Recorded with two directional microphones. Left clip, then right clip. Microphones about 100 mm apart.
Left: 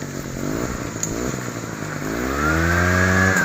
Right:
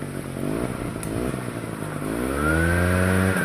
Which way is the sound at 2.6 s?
80° right.